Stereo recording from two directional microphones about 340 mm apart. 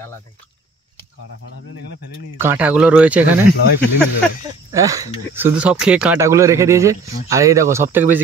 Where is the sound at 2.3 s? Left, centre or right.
Centre.